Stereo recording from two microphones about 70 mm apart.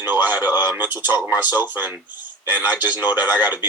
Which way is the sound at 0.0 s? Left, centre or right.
Right.